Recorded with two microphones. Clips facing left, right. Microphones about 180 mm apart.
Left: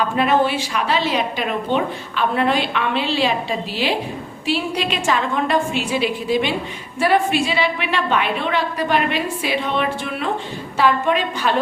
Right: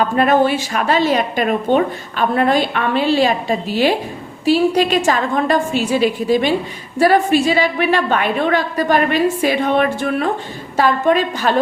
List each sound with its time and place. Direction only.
0.0 s a woman's voice: 45° right (ahead or behind)